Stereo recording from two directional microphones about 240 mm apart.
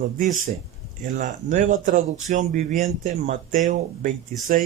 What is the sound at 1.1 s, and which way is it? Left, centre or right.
Speech, right.